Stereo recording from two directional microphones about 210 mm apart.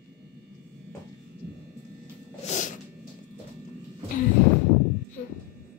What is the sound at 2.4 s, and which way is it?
Cat, 35° left (ahead or behind).